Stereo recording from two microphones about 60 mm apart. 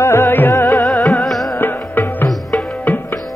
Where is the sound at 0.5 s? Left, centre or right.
Left.